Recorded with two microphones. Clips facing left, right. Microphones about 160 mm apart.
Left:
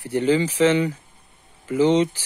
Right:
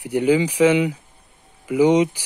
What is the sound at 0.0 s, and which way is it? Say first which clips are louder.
Speech: right 2 dB; 10° right (ahead or behind).